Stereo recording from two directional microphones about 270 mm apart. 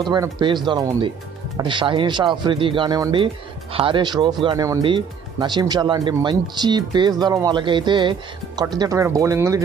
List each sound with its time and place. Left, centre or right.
0.1 s speech: centre